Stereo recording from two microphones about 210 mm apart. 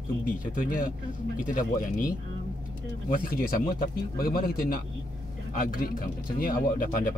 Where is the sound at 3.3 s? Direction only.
40° left (ahead or behind).